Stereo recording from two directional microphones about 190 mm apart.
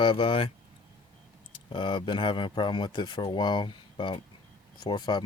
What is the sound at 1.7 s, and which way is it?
Speech, 25° left (ahead or behind).